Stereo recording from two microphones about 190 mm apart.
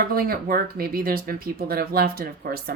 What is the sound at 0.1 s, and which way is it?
A woman's voice, 50° right (ahead or behind).